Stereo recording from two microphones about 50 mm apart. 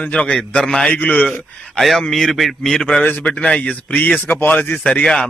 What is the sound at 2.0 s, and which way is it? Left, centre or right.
Speech, centre.